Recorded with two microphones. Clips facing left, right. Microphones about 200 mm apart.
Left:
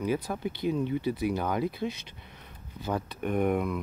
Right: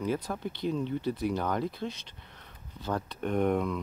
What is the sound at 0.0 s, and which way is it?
Speech, 10° left (ahead or behind).